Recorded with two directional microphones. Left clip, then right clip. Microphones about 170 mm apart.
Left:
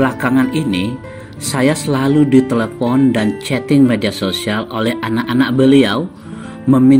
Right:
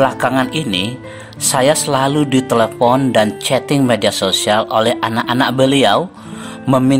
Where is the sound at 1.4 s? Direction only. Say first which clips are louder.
Right 3 dB; 35° right (ahead or behind).